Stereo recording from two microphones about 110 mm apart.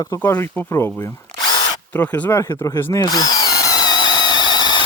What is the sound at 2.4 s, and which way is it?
Drill, 25° left (ahead or behind).